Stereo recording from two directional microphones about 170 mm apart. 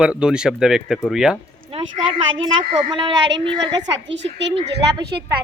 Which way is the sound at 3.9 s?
90° right.